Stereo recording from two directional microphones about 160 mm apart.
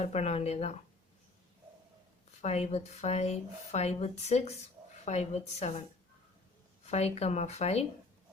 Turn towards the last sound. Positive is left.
turn(degrees=40)  # may be behind; listen again after turning